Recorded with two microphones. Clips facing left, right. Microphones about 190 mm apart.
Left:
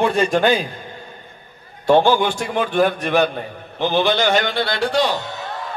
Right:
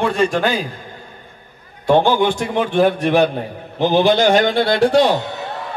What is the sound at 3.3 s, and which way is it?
A man's voice, 40° right (ahead or behind).